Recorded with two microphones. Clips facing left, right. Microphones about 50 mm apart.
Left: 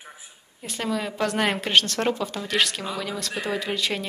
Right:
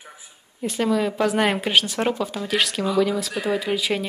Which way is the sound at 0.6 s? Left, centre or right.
Centre.